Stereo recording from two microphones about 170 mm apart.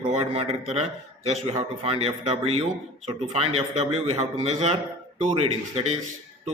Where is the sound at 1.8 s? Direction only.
35° right (ahead or behind).